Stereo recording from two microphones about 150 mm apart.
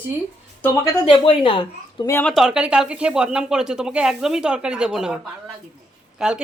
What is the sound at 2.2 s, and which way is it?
Speech, centre (ahead or behind).